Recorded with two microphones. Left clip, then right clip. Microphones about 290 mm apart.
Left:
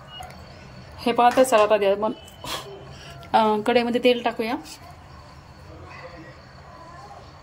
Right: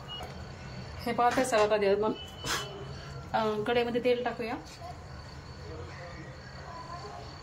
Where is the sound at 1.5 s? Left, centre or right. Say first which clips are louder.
Left 8 dB; left.